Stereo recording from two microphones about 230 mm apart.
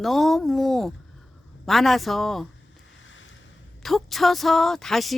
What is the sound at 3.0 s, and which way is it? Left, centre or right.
Boat, left.